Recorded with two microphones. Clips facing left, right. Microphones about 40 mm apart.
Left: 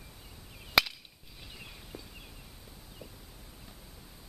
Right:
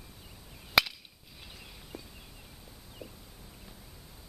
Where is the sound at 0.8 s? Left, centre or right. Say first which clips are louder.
Right 1 dB; centre.